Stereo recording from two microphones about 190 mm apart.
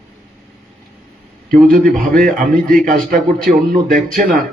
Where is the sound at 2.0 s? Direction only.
45° right (ahead or behind).